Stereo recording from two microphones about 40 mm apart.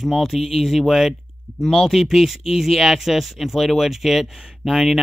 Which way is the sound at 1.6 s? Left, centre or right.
Centre.